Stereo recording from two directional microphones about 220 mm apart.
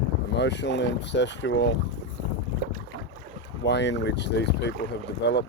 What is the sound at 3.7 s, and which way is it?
Speech, 50° left (ahead or behind).